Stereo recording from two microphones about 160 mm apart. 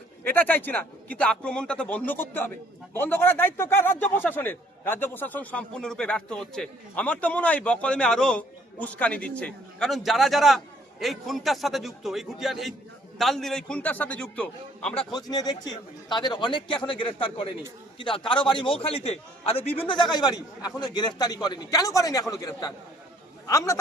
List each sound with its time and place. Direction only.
0.3 s a man's voice: 10° left (ahead or behind)
14.9 s a man's voice: 25° left (ahead or behind)